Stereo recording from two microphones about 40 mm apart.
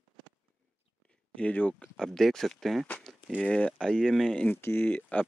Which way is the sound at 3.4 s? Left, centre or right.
Left.